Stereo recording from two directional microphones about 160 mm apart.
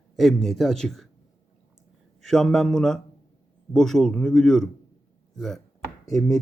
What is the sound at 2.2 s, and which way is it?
A man's voice, 5° left (ahead or behind).